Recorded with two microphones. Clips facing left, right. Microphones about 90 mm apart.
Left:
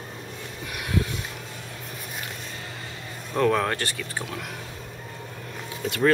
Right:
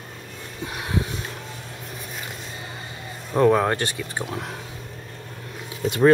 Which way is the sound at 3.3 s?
20° right (ahead or behind).